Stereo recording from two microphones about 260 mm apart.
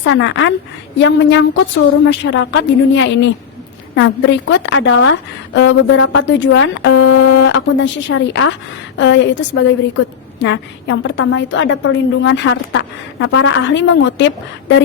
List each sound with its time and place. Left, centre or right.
0.0 s a woman's voice: left